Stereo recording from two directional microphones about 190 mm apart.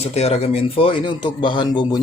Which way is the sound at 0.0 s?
35° left (ahead or behind).